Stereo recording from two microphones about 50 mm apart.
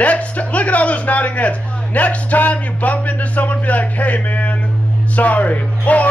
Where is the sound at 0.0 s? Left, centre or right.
Left.